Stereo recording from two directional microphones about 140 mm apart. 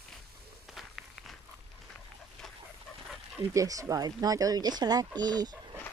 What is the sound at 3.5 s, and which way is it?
Speech, 25° right (ahead or behind).